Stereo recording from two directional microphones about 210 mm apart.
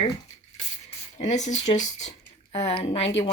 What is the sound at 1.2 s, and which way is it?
Speech, 35° left (ahead or behind).